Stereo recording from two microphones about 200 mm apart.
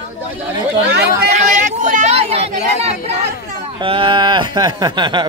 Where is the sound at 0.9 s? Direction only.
55° right (ahead or behind); by 3.2 s 30° right (ahead or behind).